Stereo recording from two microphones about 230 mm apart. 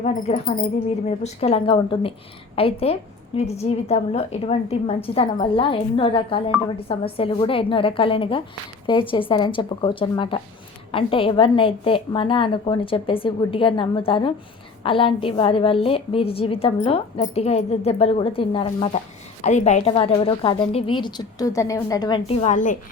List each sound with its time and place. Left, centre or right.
0.0 s a woman's voice: left